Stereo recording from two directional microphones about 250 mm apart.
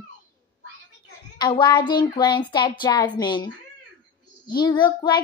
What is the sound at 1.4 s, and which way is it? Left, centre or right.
Speech, centre.